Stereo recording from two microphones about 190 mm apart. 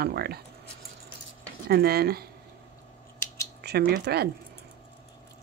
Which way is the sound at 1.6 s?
55° right (ahead or behind).